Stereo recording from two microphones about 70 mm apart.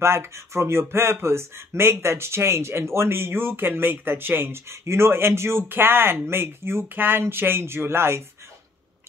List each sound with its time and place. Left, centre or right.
0.0 s speech: right